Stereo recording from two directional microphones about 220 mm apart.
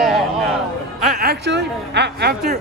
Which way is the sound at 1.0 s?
40° right (ahead or behind).